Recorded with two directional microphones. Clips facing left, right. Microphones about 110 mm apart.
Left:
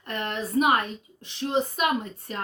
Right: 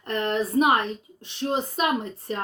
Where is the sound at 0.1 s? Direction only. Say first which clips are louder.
Right 4 dB; 35° right (ahead or behind).